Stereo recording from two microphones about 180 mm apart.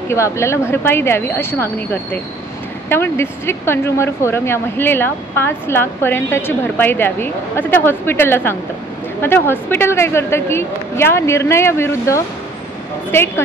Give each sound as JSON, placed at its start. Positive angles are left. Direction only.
{"t": 0.1, "sound": "speech", "side_deg": 15}
{"t": 2.9, "sound": "speech", "side_deg": 15}